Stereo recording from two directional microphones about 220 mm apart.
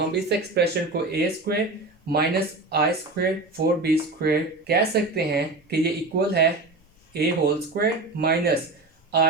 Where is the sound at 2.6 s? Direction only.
45° right (ahead or behind).